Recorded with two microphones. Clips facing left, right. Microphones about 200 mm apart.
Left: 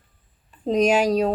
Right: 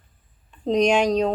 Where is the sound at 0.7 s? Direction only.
5° left (ahead or behind).